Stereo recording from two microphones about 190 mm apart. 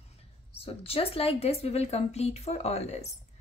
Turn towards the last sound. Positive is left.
turn(degrees=35)  # may be behind; listen again after turning